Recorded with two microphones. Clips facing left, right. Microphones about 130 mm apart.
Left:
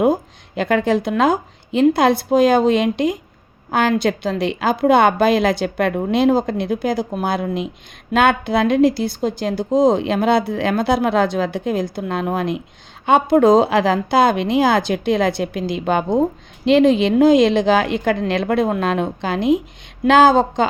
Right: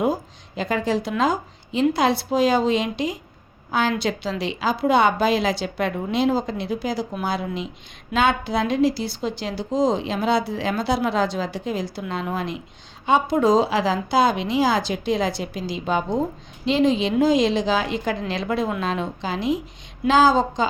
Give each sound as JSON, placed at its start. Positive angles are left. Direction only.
{"t": 0.0, "sound": "speech", "side_deg": 60}